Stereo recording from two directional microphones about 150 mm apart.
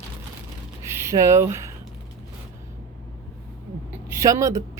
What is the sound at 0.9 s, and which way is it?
Speech, 15° right (ahead or behind).